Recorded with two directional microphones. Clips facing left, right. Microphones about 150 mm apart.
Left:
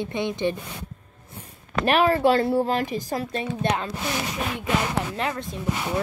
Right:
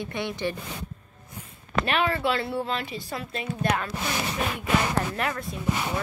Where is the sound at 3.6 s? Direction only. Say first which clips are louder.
Even; 25° left (ahead or behind).